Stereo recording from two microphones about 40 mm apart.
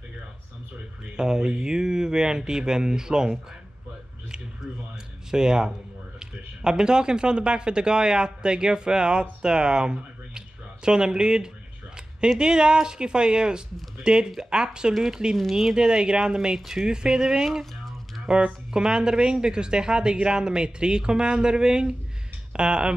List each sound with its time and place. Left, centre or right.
1.1 s speech: centre
5.3 s speech: centre
17.5 s speech: centre
18.3 s speech: right